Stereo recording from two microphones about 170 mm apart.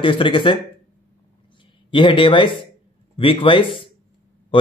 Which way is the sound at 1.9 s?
30° left (ahead or behind).